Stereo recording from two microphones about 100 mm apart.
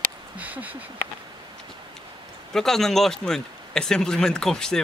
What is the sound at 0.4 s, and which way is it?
Speech, 15° right (ahead or behind).